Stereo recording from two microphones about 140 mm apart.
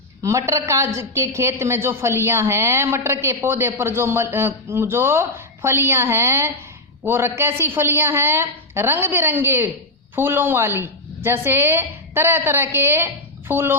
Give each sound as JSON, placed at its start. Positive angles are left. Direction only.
{"t": 0.2, "sound": "a woman's voice", "side_deg": -20}